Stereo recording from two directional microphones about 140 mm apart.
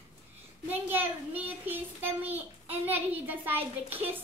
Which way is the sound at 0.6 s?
15° right (ahead or behind).